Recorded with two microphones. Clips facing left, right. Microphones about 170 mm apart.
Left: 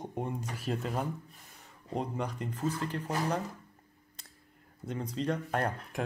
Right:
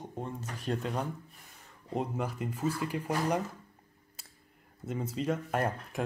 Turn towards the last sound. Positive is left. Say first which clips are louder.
# right 1 dB
turn(degrees=-5)  # may be behind; listen again after turning